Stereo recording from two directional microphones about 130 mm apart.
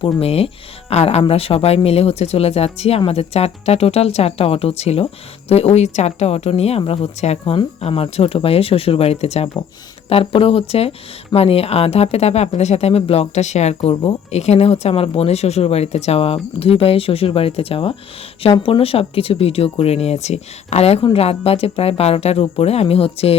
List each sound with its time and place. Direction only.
0.0 s speech: 50° left (ahead or behind)